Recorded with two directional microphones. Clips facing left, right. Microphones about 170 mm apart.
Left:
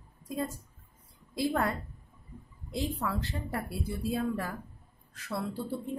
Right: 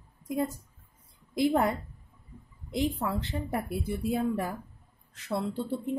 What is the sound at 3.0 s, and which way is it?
Speech, 20° right (ahead or behind).